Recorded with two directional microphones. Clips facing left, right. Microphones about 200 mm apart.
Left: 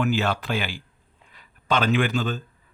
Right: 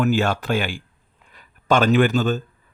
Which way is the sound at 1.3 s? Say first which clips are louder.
Right 6 dB; 45° right (ahead or behind).